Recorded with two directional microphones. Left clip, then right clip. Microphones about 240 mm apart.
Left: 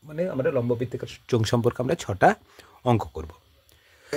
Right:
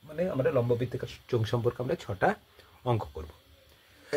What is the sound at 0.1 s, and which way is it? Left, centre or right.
Speech, left.